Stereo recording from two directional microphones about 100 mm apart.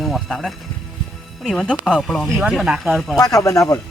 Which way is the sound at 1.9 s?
Centre (ahead or behind).